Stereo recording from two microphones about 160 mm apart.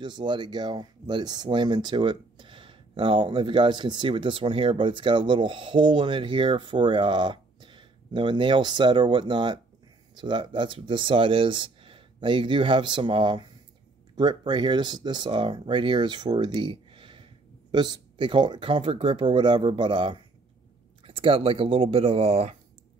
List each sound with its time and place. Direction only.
0.0 s speech: 30° right (ahead or behind)